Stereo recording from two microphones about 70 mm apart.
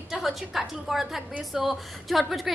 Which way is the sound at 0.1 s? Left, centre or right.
Centre.